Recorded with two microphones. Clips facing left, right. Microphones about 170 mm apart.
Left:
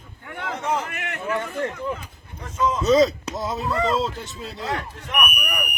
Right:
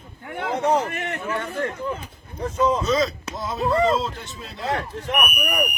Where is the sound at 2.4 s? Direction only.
35° right (ahead or behind).